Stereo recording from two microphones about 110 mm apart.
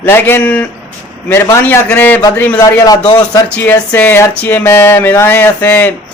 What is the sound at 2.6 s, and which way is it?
Speech, 30° left (ahead or behind).